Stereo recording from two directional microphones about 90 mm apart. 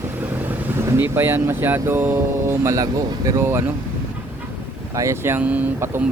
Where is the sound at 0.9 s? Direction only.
25° right (ahead or behind).